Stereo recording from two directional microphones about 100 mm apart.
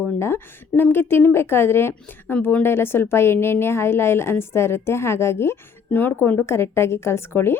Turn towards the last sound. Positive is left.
turn(degrees=25)  # may be behind; listen again after turning